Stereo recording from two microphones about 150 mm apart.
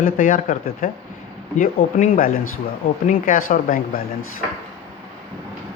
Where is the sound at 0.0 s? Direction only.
65° left (ahead or behind).